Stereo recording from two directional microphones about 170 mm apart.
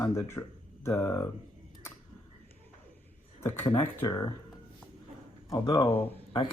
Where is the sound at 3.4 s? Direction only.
15° left (ahead or behind).